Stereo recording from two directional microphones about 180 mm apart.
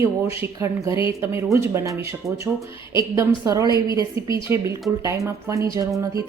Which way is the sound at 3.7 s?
25° left (ahead or behind).